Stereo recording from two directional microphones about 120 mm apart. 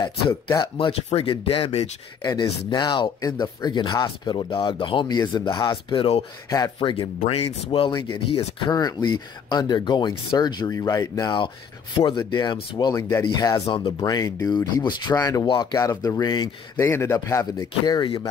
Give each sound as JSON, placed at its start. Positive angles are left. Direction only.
{"t": 0.6, "sound": "speech", "side_deg": 40}
{"t": 0.9, "sound": "speech", "side_deg": 50}
{"t": 2.2, "sound": "speech", "side_deg": 35}
{"t": 16.7, "sound": "speech", "side_deg": 20}